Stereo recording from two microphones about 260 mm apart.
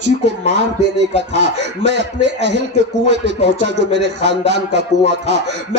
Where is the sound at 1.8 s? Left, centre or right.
Right.